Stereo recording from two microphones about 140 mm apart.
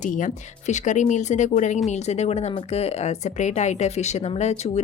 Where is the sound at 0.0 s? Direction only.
65° left (ahead or behind).